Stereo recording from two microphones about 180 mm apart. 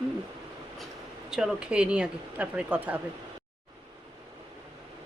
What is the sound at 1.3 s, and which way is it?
Speech, 5° right (ahead or behind).